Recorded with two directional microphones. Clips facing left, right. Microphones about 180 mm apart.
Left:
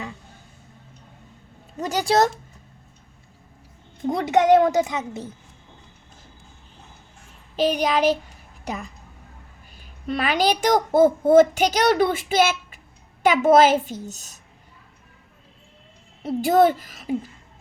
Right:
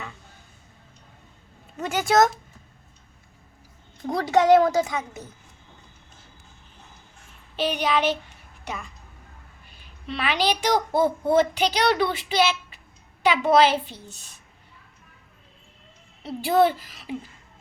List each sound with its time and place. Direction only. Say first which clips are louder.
1.8 s child singing: even; 35° left (ahead or behind)
4.0 s a woman's voice: left 1 dB; 20° left (ahead or behind)
7.5 s child singing: left 3 dB; 40° left (ahead or behind)
8.6 s a woman's voice: left 4 dB; 40° left (ahead or behind)
10.1 s a child's voice: left 3 dB; 45° left (ahead or behind)
16.2 s a child's voice: left 3 dB; 45° left (ahead or behind)